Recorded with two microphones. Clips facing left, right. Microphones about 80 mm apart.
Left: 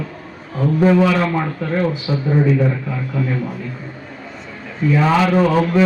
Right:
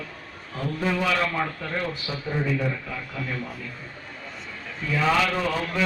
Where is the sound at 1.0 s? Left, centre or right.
Left.